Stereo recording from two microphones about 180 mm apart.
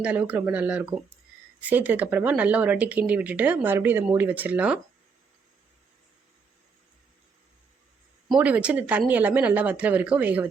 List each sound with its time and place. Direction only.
0.0 s speech: 5° right (ahead or behind)
8.3 s speech: 10° right (ahead or behind)